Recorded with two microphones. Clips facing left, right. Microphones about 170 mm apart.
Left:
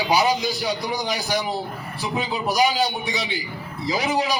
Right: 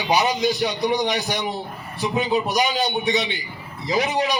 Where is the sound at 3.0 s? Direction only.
30° left (ahead or behind).